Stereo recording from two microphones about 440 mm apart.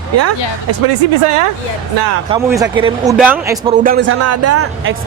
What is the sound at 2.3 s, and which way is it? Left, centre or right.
A man's voice, centre.